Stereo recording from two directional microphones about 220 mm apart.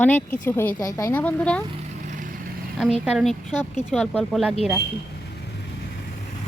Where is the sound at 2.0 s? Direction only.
35° right (ahead or behind).